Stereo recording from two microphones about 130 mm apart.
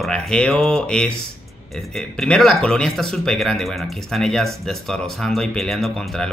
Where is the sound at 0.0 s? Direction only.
5° left (ahead or behind).